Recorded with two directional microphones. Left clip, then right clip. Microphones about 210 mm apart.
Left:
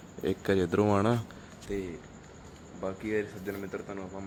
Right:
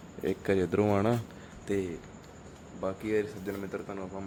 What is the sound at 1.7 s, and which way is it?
Speech, 50° right (ahead or behind).